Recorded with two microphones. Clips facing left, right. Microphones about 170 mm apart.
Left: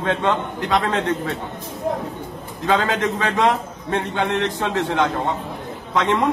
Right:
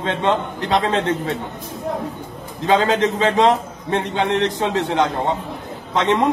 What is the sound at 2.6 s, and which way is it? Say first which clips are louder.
A man's voice: right 3 dB; 20° right (ahead or behind).